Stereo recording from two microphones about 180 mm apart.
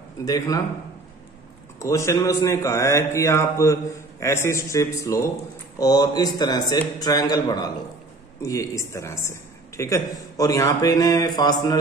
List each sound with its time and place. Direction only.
0.2 s a woman's voice: 20° left (ahead or behind)
1.8 s a woman's voice: 15° left (ahead or behind)